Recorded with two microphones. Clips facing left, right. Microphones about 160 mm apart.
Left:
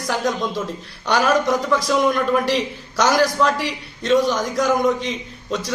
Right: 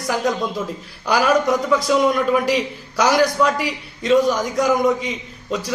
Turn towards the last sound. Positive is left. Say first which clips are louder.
# right 1 dB
turn(degrees=0)  # may be behind; listen again after turning